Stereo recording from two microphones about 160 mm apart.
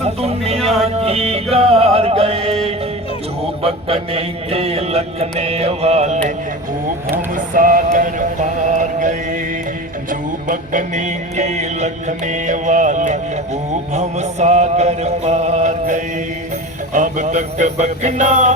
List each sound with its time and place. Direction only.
0.0 s music: 40° right (ahead or behind)
0.6 s music: centre (ahead or behind)
0.9 s music: 40° right (ahead or behind)
3.6 s mantra: 35° right (ahead or behind)
7.3 s music: 55° right (ahead or behind)